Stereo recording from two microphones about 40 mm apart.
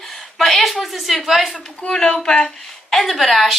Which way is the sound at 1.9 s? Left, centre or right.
Centre.